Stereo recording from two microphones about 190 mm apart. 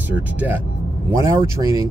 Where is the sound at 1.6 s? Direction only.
15° right (ahead or behind).